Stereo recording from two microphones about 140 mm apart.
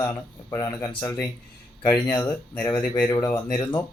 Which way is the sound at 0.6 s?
25° left (ahead or behind).